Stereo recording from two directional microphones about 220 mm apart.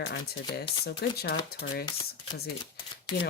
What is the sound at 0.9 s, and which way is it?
Speech, 45° left (ahead or behind).